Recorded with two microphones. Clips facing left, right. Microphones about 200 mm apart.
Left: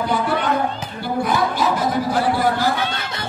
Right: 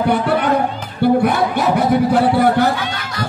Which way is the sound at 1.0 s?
65° right (ahead or behind).